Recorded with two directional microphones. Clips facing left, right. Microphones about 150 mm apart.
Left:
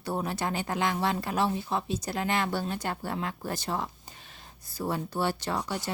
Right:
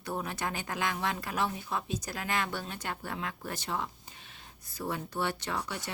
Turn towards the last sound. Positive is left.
turn(degrees=35)  # may be behind; listen again after turning